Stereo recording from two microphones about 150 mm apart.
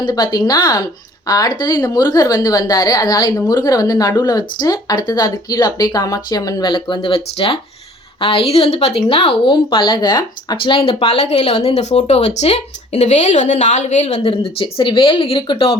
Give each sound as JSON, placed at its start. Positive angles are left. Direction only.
{"t": 0.0, "sound": "a woman's voice", "side_deg": 25}